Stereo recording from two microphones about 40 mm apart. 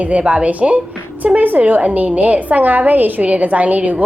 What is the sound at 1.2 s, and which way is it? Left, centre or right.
A woman's voice, right.